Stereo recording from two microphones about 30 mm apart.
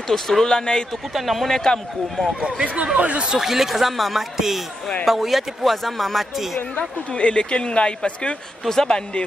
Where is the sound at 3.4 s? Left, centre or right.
Centre.